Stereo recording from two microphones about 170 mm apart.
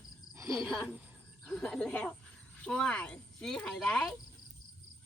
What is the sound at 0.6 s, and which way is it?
Speech, centre (ahead or behind).